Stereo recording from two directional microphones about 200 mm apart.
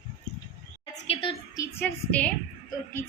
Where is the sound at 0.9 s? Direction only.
30° left (ahead or behind); by 2.3 s 5° left (ahead or behind).